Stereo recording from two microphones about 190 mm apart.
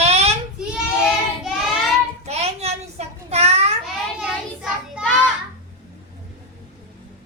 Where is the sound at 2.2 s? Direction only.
35° right (ahead or behind).